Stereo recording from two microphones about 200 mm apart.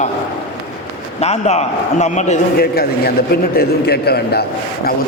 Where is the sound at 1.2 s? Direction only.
35° left (ahead or behind).